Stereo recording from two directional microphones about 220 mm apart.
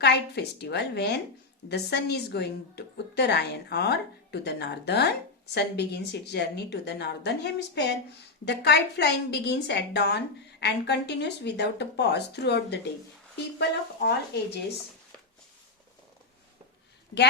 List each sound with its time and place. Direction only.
0.0 s a woman's voice: 50° left (ahead or behind)